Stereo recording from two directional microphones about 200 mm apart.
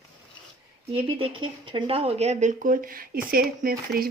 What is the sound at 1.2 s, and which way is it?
Speech, 25° right (ahead or behind).